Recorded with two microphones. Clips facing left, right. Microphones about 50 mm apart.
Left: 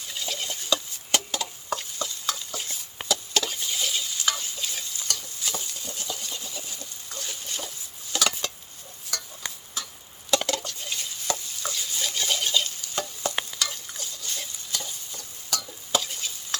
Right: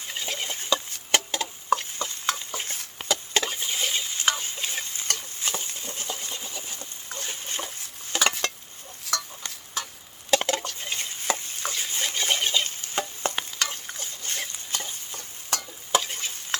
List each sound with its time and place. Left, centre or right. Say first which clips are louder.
0.1 s a sound: right 1 dB; right
3.1 s stir: right 1 dB; right
8.3 s a sound: right 4 dB; right
9.1 s stir: right 6 dB; right
10.3 s stir: right 2 dB; right
13.6 s chicken: right 1 dB; right
14.7 s stir: right 1 dB; right